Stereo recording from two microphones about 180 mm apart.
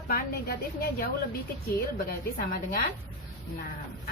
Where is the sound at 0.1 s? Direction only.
55° left (ahead or behind).